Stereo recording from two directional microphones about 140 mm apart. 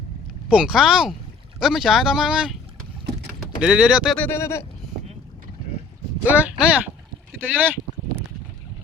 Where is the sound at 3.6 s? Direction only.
5° right (ahead or behind).